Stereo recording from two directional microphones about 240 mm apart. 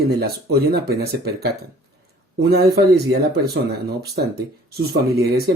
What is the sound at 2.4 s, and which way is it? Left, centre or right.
Speech, right.